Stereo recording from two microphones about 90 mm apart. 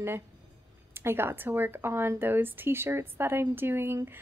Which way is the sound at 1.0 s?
25° right (ahead or behind).